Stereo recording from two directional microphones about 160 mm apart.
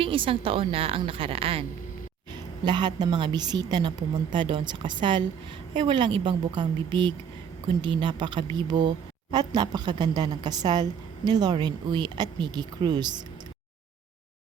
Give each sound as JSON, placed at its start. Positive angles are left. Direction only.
{"t": 0.0, "sound": "a woman's voice", "side_deg": -35}